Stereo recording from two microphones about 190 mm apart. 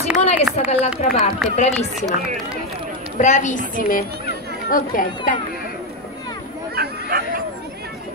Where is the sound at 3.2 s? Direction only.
40° left (ahead or behind).